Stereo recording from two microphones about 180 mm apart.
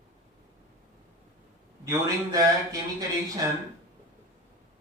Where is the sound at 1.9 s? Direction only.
20° right (ahead or behind).